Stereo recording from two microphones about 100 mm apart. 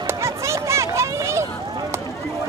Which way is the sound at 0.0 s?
30° right (ahead or behind).